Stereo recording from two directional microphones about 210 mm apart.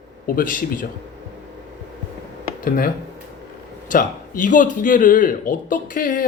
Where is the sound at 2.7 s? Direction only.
45° left (ahead or behind).